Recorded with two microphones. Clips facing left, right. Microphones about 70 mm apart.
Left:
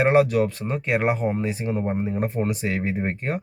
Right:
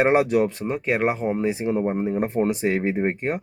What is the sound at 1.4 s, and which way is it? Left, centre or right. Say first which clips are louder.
Speech: right 3 dB; centre.